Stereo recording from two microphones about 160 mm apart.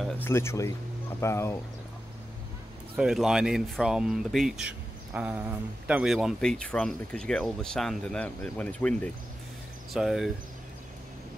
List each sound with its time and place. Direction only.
0.2 s speech: 15° left (ahead or behind)
3.0 s speech: 5° right (ahead or behind)